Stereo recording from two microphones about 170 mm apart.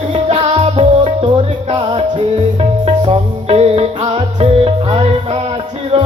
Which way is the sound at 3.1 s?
35° right (ahead or behind).